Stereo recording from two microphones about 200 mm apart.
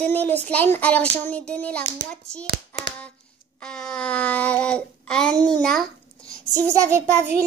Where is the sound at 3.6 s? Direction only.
5° left (ahead or behind).